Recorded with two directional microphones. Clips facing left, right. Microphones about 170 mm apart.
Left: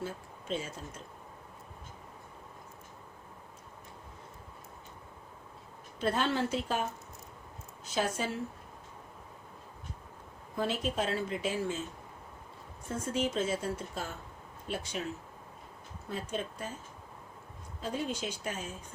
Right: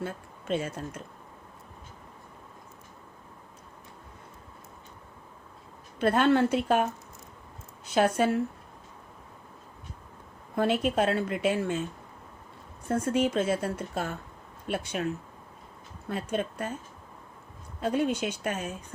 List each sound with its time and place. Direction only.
0.0 s a sound: 60° right (ahead or behind)
6.0 s speech: 60° right (ahead or behind)
7.9 s speech: 60° right (ahead or behind)
10.5 s speech: 65° right (ahead or behind)
12.9 s speech: 65° right (ahead or behind)
16.0 s speech: 60° right (ahead or behind)
17.7 s speech: 65° right (ahead or behind)